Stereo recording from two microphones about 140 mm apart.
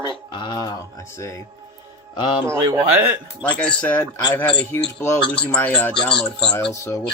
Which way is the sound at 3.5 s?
10° left (ahead or behind).